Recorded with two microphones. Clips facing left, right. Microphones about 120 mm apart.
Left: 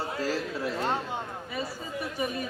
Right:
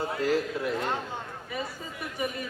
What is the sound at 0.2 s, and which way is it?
Mantra, 30° left (ahead or behind).